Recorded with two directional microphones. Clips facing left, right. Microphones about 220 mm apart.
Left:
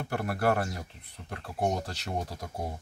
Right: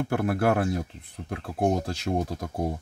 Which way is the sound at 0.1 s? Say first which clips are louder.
Right 4 dB; 55° right (ahead or behind).